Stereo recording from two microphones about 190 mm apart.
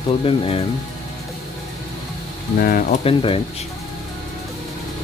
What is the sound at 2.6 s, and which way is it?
Speech, 55° left (ahead or behind).